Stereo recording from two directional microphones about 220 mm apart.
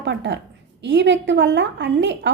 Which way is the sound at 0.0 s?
55° right (ahead or behind).